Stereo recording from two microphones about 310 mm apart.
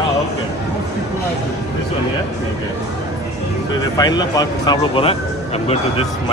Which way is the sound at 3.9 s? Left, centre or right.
Centre.